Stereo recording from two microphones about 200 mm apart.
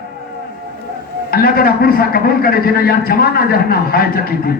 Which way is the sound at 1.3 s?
50° left (ahead or behind).